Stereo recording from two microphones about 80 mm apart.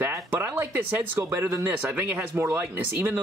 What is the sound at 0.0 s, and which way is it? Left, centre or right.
Speech, right.